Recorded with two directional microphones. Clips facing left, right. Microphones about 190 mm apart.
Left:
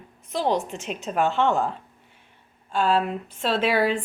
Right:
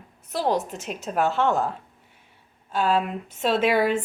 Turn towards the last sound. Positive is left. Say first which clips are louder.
# right 1 dB
turn(degrees=-10)  # may be behind; listen again after turning